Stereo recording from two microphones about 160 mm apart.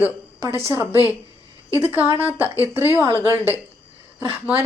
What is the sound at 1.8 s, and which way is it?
Speech, 15° right (ahead or behind).